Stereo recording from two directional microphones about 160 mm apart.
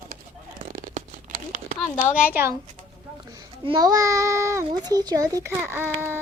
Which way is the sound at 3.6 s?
25° right (ahead or behind).